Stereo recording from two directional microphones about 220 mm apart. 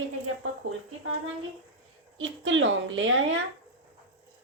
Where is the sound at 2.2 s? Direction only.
60° right (ahead or behind).